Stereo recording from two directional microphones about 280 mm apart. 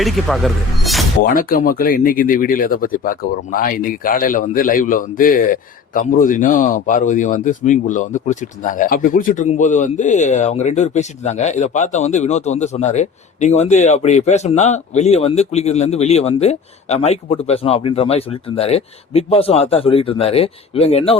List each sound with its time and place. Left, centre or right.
0.0 s speech: centre
1.2 s speech: left